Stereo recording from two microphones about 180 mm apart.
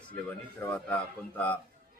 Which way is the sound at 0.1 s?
10° left (ahead or behind).